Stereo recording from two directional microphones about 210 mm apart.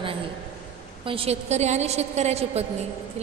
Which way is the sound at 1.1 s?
30° right (ahead or behind).